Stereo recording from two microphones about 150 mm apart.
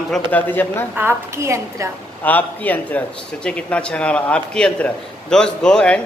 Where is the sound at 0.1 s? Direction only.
10° left (ahead or behind).